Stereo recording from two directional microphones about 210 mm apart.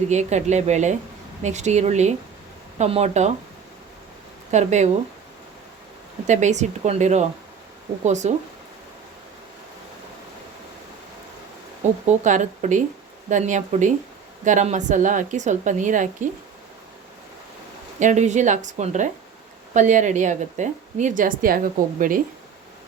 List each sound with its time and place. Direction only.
0.1 s a woman's voice: 35° right (ahead or behind)
4.5 s a woman's voice: 35° right (ahead or behind)
6.2 s a woman's voice: 35° right (ahead or behind)
12.0 s a woman's voice: 35° right (ahead or behind)
18.0 s a woman's voice: 35° right (ahead or behind)